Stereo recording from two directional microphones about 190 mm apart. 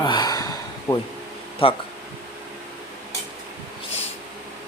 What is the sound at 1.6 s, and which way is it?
Speech, 30° left (ahead or behind).